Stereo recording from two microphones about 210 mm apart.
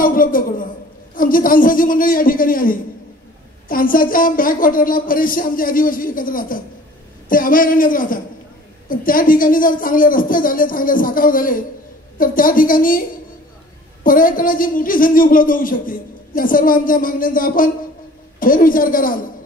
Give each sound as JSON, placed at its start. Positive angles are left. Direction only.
{"t": 0.0, "sound": "speech", "side_deg": 40}
{"t": 14.0, "sound": "speech", "side_deg": 40}